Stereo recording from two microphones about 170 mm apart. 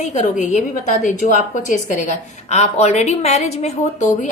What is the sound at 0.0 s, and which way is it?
A woman's voice, 45° left (ahead or behind).